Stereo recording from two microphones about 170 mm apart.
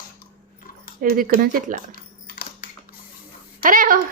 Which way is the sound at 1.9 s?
60° left (ahead or behind).